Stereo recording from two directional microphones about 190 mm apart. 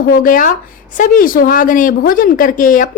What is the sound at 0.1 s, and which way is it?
Speech, 45° left (ahead or behind).